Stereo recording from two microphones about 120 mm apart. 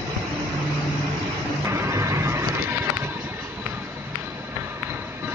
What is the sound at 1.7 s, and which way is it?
Vehicle, 25° right (ahead or behind).